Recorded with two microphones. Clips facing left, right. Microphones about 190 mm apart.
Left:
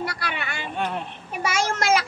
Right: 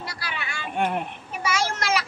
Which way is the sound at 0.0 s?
60° left (ahead or behind).